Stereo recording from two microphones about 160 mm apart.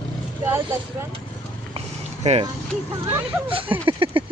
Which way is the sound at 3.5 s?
35° right (ahead or behind).